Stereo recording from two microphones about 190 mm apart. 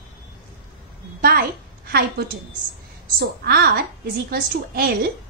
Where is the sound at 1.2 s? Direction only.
50° right (ahead or behind).